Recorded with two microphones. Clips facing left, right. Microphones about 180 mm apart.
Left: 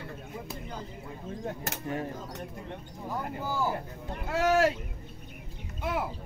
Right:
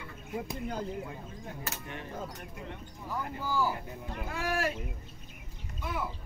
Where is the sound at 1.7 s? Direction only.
40° left (ahead or behind).